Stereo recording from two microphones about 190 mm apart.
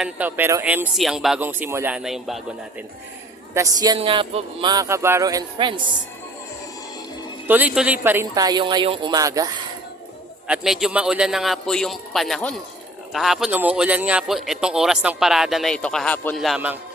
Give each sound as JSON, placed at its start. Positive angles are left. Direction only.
{"t": 0.0, "sound": "speech", "side_deg": -10}
{"t": 3.5, "sound": "speech", "side_deg": -20}
{"t": 7.4, "sound": "speech", "side_deg": -10}
{"t": 10.4, "sound": "a man's voice", "side_deg": -5}